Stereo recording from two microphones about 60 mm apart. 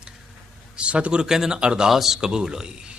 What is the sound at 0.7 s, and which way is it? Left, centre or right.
A man's voice, centre.